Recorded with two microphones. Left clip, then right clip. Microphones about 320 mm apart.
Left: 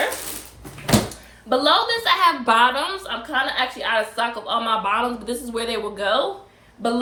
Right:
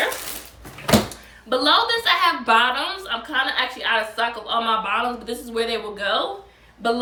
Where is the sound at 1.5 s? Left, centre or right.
Centre.